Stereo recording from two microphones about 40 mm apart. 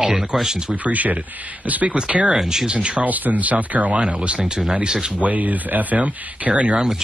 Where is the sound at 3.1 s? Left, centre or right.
Right.